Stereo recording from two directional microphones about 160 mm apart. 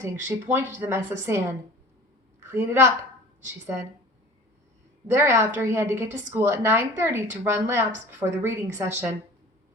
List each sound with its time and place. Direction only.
0.0 s a woman's voice: 15° right (ahead or behind)
5.1 s a woman's voice: 15° right (ahead or behind)